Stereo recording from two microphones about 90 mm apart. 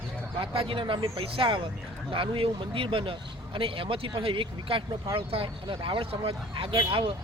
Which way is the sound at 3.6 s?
90° right.